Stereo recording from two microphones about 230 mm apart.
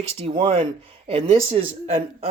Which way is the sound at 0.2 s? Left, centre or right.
Right.